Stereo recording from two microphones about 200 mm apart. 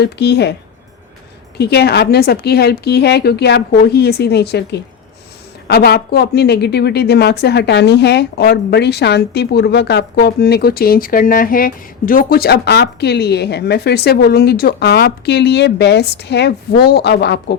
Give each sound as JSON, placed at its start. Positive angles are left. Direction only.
{"t": 0.0, "sound": "speech", "side_deg": 55}
{"t": 1.5, "sound": "speech", "side_deg": 55}